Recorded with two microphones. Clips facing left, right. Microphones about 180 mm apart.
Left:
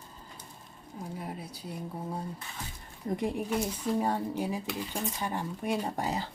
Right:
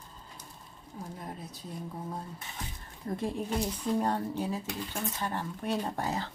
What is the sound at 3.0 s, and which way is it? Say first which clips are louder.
Speech: left 2 dB; 15° left (ahead or behind).